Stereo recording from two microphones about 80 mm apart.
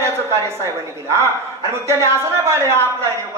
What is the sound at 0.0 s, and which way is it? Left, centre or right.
A woman's voice, right.